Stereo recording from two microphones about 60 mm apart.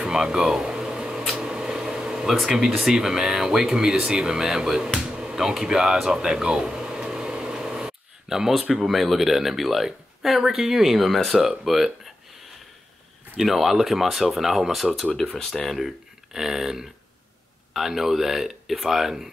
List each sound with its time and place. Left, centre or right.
0.0 s air conditioning: centre
1.3 s speech: centre
13.4 s speech: centre
16.3 s a sound: centre
17.7 s speech: centre